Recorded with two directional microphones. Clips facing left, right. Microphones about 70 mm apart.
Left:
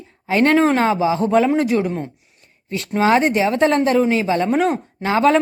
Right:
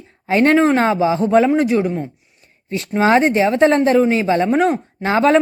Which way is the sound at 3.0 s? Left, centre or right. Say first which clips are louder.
Right 2 dB; right.